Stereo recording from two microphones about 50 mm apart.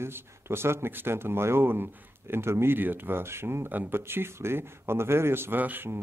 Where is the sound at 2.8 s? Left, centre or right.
Right.